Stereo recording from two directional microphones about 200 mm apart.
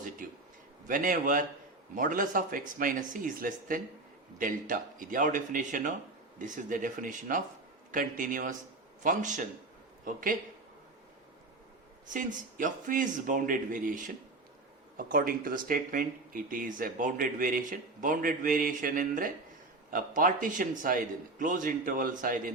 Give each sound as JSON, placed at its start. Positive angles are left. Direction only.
{"t": 0.9, "sound": "speech", "side_deg": -40}
{"t": 12.1, "sound": "speech", "side_deg": -40}